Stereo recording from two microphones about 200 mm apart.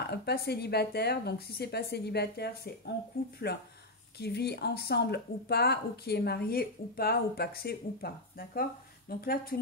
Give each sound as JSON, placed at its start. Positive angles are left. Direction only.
{"t": 0.0, "sound": "speech", "side_deg": 55}